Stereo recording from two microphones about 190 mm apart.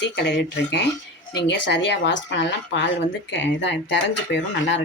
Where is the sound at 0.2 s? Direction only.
65° left (ahead or behind).